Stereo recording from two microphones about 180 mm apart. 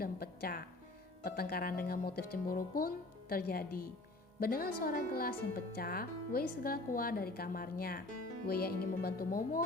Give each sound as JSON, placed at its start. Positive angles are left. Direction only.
{"t": 0.0, "sound": "music", "side_deg": 55}
{"t": 1.2, "sound": "a woman's voice", "side_deg": 60}